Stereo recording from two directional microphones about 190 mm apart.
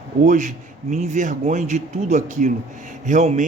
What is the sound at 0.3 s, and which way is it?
A man's voice, 40° right (ahead or behind).